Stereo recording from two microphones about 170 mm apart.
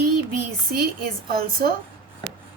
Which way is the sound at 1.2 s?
60° right (ahead or behind).